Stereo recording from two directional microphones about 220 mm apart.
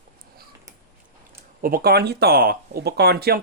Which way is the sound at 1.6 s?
40° right (ahead or behind).